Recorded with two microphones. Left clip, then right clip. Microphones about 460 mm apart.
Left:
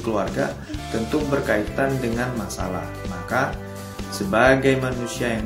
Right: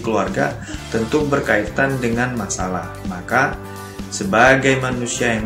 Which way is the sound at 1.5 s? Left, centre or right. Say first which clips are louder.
Right 4 dB; left.